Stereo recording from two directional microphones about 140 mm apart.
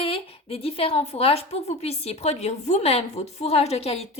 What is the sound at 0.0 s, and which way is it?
A woman's voice, 40° left (ahead or behind).